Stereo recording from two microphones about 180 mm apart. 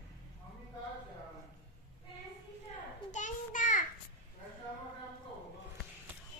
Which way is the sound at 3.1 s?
45° left (ahead or behind).